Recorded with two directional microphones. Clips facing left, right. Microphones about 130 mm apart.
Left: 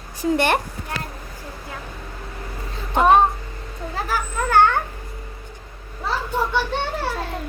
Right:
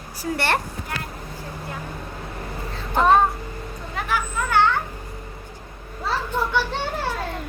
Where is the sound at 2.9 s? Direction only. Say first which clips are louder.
Left 2 dB; 15° left (ahead or behind).